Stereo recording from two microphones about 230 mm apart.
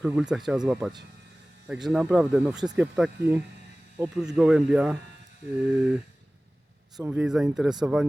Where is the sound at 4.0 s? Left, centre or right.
Centre.